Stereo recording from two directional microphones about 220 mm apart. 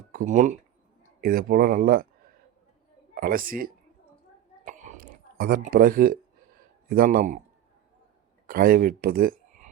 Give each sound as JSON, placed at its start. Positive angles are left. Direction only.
{"t": 0.1, "sound": "speech", "side_deg": -35}
{"t": 3.2, "sound": "speech", "side_deg": -40}
{"t": 4.6, "sound": "a sound", "side_deg": -35}
{"t": 6.9, "sound": "speech", "side_deg": -40}
{"t": 8.4, "sound": "speech", "side_deg": -40}